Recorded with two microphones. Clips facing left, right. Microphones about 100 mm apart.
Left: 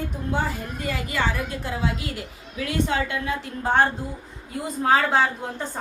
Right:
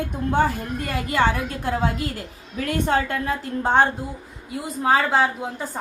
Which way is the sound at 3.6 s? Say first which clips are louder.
Right 2 dB; 20° right (ahead or behind).